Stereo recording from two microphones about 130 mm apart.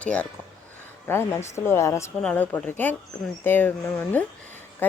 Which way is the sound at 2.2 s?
10° left (ahead or behind).